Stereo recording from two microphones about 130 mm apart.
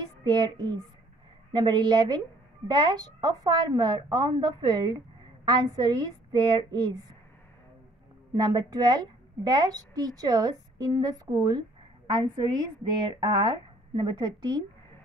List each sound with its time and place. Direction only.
0.2 s a woman's voice: 35° right (ahead or behind)
8.4 s a woman's voice: 30° right (ahead or behind)